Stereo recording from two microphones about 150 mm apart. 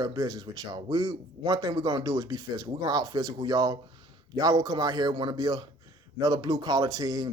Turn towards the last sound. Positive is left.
turn(degrees=-25)  # may be behind; listen again after turning